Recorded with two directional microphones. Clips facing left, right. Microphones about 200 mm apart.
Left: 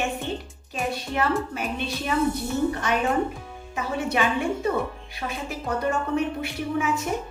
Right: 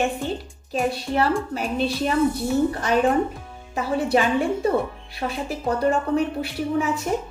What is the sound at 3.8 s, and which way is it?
A woman's voice, 35° right (ahead or behind).